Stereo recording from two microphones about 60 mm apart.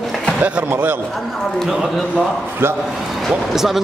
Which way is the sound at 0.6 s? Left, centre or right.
Right.